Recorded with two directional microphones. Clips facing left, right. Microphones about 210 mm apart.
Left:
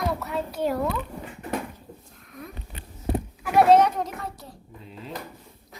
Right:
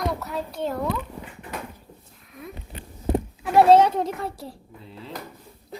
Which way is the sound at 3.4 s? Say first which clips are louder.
Right 2 dB; 30° right (ahead or behind).